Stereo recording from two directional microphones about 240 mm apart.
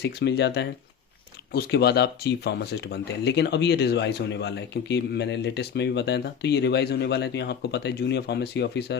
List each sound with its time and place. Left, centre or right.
0.0 s speech: left